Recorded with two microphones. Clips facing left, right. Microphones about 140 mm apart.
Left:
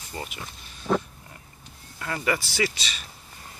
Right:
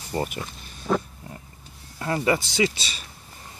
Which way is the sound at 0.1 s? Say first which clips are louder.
Right 9 dB; 40° right (ahead or behind).